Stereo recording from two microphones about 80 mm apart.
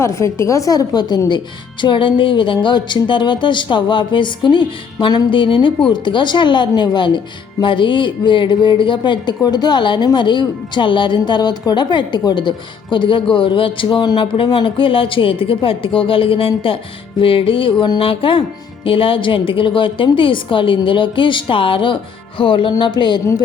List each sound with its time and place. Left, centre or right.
0.0 s a woman's voice: left
1.8 s speech: left
5.9 s a woman's voice: left
7.6 s speech: left
9.4 s a woman's voice: left
22.8 s speech: left